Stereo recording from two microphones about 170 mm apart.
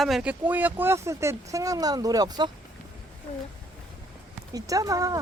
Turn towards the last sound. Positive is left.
turn(degrees=-20)  # may be behind; listen again after turning